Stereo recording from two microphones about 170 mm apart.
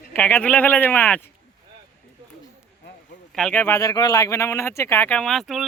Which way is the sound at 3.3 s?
5° left (ahead or behind).